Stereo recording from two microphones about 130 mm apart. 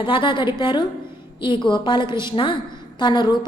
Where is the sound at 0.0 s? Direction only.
40° left (ahead or behind).